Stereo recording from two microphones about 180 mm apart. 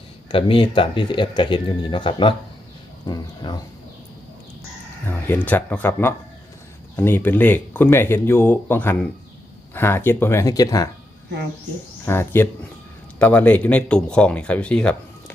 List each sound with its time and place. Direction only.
0.3 s speech: 30° left (ahead or behind)
5.5 s speech: 10° left (ahead or behind)
12.0 s speech: 15° left (ahead or behind)